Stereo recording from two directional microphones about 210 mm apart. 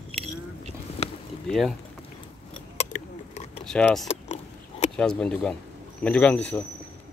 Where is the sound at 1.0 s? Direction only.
30° left (ahead or behind).